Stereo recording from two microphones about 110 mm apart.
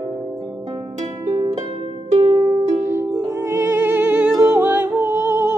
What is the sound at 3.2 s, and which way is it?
Music, 25° right (ahead or behind).